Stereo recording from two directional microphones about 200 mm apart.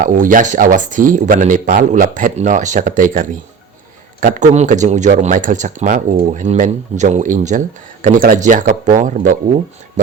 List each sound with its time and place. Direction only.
0.0 s speech: 40° right (ahead or behind)